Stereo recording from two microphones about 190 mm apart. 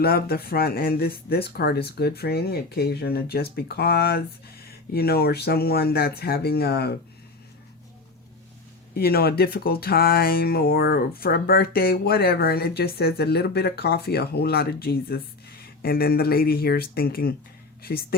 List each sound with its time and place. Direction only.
0.0 s speech: 55° left (ahead or behind)
9.0 s speech: 55° left (ahead or behind)